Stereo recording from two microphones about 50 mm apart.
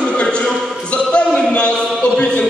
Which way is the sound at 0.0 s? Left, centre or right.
Left.